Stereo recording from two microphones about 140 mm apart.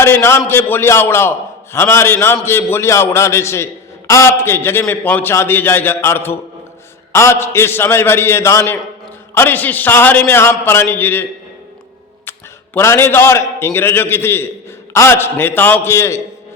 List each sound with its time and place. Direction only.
0.0 s a man's voice: 20° left (ahead or behind)
12.7 s a man's voice: 15° left (ahead or behind)